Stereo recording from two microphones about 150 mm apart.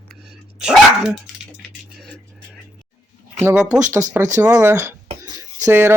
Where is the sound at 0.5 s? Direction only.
5° right (ahead or behind).